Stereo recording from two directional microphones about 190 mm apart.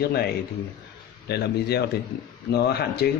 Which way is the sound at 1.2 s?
60° left (ahead or behind).